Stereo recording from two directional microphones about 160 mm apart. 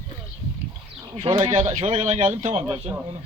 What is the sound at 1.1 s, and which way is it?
Speech, 30° right (ahead or behind).